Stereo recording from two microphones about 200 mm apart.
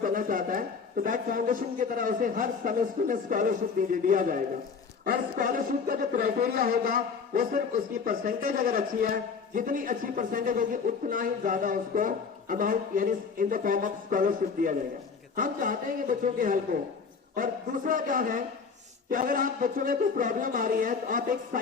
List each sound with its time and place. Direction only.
0.0 s speech: 45° right (ahead or behind)